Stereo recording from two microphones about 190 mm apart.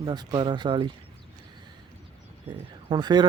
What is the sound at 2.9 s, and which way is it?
Speech, 20° right (ahead or behind).